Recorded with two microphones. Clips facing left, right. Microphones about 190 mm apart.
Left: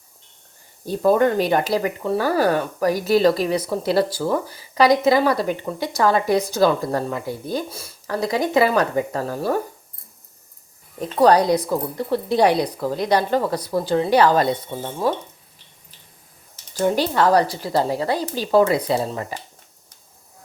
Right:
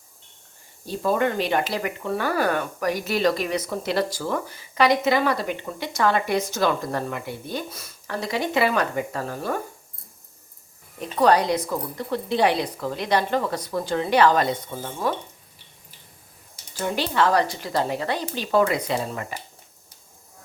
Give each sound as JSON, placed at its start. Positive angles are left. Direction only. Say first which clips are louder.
{"t": 0.9, "sound": "speech", "louder": "left 6 dB", "side_deg": 45}
{"t": 11.2, "sound": "speech", "louder": "left 4 dB", "side_deg": 35}
{"t": 14.8, "sound": "stir", "louder": "left 4 dB", "side_deg": 25}
{"t": 16.8, "sound": "speech", "louder": "left 4 dB", "side_deg": 40}